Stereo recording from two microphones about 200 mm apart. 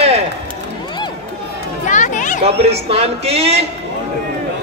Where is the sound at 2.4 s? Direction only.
30° right (ahead or behind).